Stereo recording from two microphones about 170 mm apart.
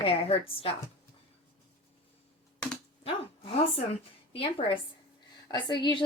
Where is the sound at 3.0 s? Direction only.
35° left (ahead or behind).